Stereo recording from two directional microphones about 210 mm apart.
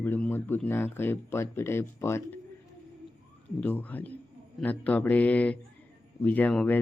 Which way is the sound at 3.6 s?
5° left (ahead or behind).